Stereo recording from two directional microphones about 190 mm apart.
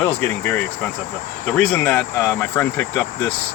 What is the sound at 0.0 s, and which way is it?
Speech, 10° left (ahead or behind).